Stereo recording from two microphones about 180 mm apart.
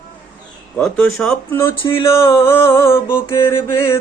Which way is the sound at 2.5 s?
15° left (ahead or behind).